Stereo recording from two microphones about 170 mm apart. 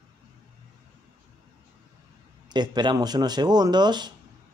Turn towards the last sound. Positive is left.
turn(degrees=-25)  # may be behind; listen again after turning